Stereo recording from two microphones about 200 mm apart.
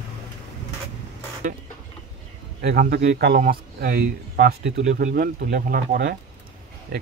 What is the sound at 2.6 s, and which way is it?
A man's voice, 55° right (ahead or behind).